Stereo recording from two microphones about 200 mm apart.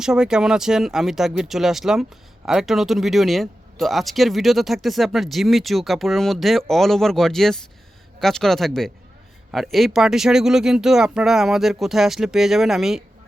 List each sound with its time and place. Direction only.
0.0 s speech: 5° right (ahead or behind)